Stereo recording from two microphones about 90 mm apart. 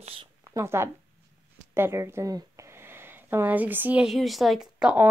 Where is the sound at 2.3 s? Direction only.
35° right (ahead or behind).